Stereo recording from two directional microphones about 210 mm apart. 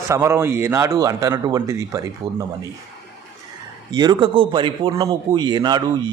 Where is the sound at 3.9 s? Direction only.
20° right (ahead or behind).